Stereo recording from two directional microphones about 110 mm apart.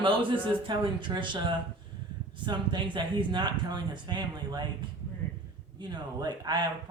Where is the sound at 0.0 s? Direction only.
50° right (ahead or behind).